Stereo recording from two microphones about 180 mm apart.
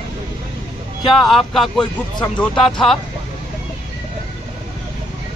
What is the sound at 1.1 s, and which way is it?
Speech, centre (ahead or behind).